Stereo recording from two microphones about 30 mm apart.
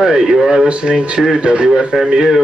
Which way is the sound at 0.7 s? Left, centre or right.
Right.